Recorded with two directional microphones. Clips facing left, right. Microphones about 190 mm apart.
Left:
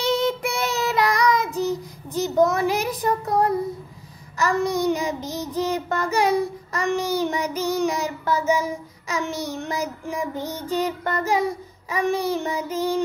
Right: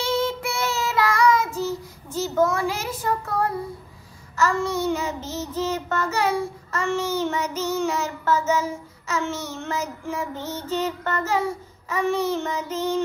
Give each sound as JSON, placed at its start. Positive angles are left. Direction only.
{"t": 0.0, "sound": "child singing", "side_deg": 15}